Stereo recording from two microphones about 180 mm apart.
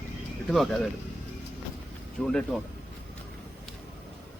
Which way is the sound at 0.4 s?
Centre (ahead or behind).